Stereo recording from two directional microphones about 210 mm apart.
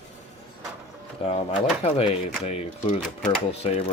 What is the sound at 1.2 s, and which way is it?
Speech, 30° left (ahead or behind).